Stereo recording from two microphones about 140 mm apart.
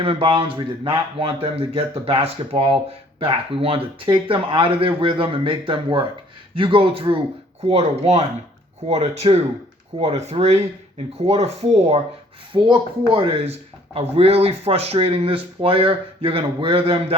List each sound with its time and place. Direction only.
0.0 s speech: 40° right (ahead or behind)
12.5 s speech: 35° right (ahead or behind)